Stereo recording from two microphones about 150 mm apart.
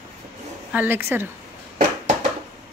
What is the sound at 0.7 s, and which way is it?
Speech, 15° right (ahead or behind).